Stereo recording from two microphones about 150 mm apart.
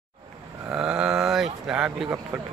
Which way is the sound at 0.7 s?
5° right (ahead or behind).